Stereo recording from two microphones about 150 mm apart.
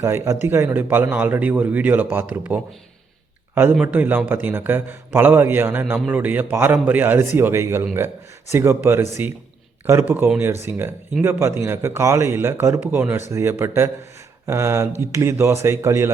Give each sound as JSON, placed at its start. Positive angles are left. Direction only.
{"t": 0.0, "sound": "a man's voice", "side_deg": -15}